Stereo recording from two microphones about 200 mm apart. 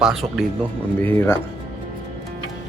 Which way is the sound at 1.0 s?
10° left (ahead or behind).